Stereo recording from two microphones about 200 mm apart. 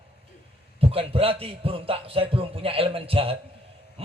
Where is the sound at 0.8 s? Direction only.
30° right (ahead or behind).